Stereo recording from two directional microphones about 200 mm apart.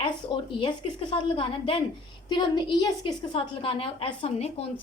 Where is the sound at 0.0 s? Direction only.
25° left (ahead or behind).